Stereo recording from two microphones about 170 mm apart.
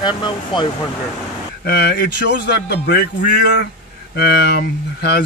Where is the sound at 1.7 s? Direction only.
70° left (ahead or behind).